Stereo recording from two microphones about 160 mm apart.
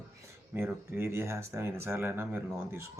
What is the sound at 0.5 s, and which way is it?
Speech, 15° right (ahead or behind).